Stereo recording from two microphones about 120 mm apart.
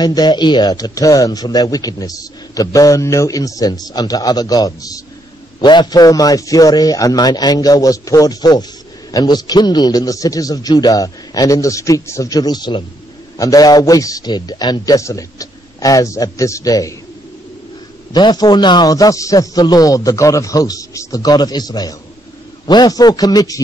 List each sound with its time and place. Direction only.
0.0 s a man's voice: 35° left (ahead or behind)
18.1 s a man's voice: 35° left (ahead or behind)